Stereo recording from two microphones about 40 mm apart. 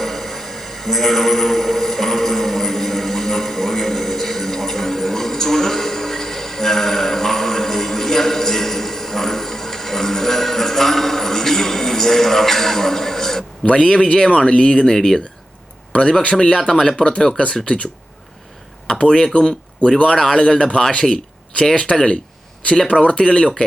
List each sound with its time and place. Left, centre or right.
0.0 s a sound: centre
13.7 s speech: centre
15.9 s speech: left
17.4 s speech: left
18.9 s speech: left